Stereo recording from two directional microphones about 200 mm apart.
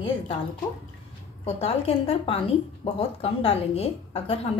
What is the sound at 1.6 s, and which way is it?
A woman's voice, 30° left (ahead or behind).